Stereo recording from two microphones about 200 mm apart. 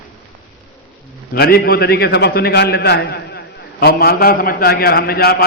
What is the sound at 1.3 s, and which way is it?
A man's voice, 55° left (ahead or behind).